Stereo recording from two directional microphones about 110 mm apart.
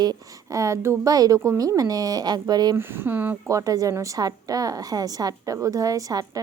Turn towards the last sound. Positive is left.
turn(degrees=-35)  # may be behind; listen again after turning